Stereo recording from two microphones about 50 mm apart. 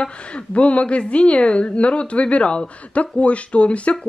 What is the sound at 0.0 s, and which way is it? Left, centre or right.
A woman's voice, left.